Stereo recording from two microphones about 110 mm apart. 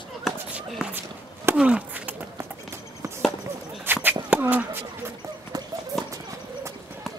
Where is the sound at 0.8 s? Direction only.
5° right (ahead or behind).